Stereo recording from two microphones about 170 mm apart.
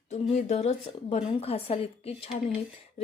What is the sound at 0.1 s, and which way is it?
A woman's voice, 45° left (ahead or behind).